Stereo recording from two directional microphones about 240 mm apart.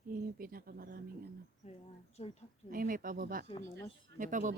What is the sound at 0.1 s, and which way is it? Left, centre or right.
Speech, right.